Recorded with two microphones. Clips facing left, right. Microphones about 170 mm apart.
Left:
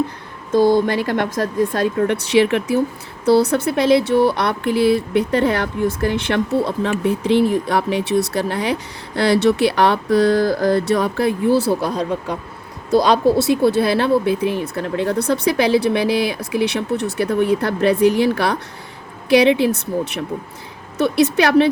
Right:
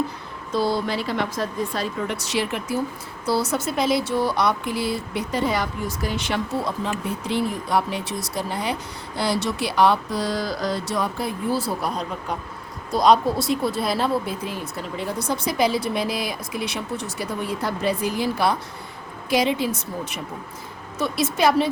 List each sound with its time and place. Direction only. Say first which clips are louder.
1.1 s speech: left 6 dB; 65° left (ahead or behind)
13.3 s speech: left 8 dB; 70° left (ahead or behind)